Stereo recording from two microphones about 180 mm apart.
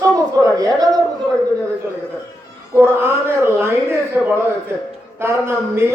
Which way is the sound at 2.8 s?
10° right (ahead or behind).